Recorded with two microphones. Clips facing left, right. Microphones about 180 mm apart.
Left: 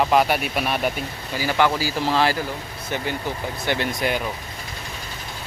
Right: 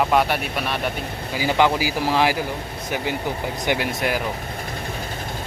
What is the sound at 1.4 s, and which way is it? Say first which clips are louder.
Speech: right 2 dB; 15° right (ahead or behind).